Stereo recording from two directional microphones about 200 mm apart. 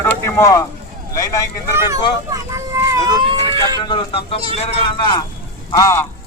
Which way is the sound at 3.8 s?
25° left (ahead or behind).